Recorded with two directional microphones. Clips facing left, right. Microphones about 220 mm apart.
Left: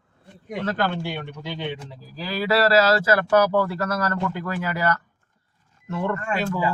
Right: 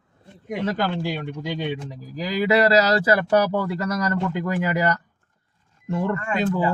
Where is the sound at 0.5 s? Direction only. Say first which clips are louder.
Right 1 dB; 10° right (ahead or behind).